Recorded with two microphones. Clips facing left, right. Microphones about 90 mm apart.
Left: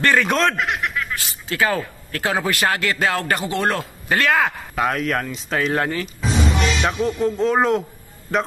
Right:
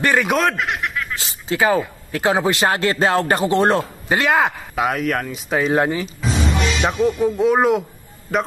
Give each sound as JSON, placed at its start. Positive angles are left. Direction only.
{"t": 0.0, "sound": "speech", "side_deg": -15}
{"t": 1.1, "sound": "speech", "side_deg": -20}
{"t": 4.7, "sound": "speech", "side_deg": -5}
{"t": 6.2, "sound": "music", "side_deg": -5}
{"t": 7.0, "sound": "speech", "side_deg": -15}